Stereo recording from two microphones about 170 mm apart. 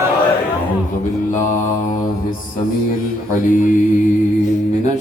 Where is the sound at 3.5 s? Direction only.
50° left (ahead or behind).